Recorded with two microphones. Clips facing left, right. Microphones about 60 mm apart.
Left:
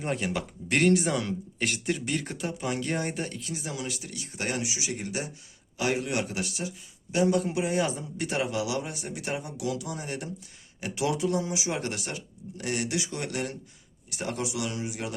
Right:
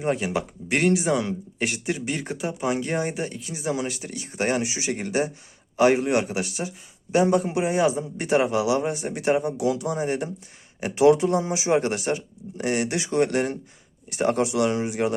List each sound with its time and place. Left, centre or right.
0.0 s speech: centre
3.8 s speech: right
5.7 s a man's voice: right; by 8.0 s centre
8.2 s speech: right